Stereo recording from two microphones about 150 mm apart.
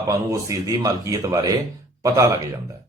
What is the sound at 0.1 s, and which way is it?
Speech, 20° right (ahead or behind).